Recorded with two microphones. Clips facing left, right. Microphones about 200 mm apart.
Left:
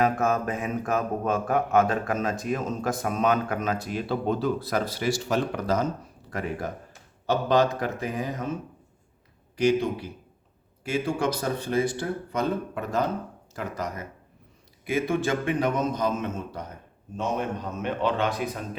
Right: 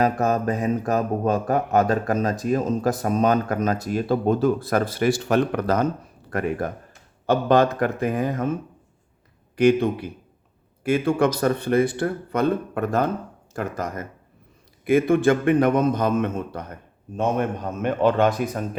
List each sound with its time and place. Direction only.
0.0 s mantra: 35° right (ahead or behind); by 5.9 s 60° right (ahead or behind)
6.3 s speech: 55° right (ahead or behind)
9.6 s a man's voice: 55° right (ahead or behind)